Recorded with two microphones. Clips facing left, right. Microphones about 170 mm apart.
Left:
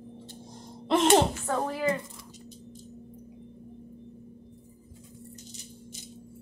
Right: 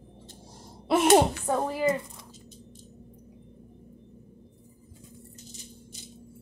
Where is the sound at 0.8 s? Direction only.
10° right (ahead or behind).